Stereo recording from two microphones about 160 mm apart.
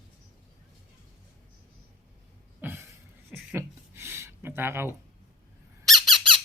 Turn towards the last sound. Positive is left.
turn(degrees=0)  # may be behind; listen again after turning